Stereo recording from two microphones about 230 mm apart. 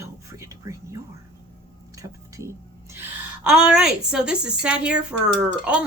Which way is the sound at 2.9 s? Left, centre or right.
Centre.